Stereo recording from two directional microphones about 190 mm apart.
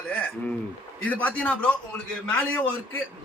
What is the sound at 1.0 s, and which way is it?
Speech, 10° left (ahead or behind).